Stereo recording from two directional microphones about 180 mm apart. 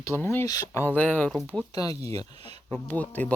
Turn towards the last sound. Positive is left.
turn(degrees=10)  # may be behind; listen again after turning